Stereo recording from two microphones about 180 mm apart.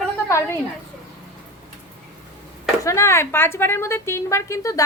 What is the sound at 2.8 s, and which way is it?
Speech, 15° left (ahead or behind).